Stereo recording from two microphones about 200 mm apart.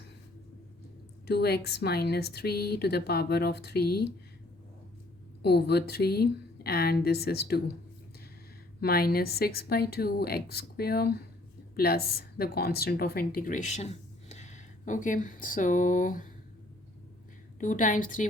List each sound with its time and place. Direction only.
1.3 s speech: 55° left (ahead or behind)
5.4 s speech: 55° left (ahead or behind)
8.8 s speech: 50° left (ahead or behind)
17.6 s a woman's voice: 40° left (ahead or behind)